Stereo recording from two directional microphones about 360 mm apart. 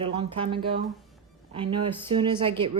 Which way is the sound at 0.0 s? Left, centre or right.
Centre.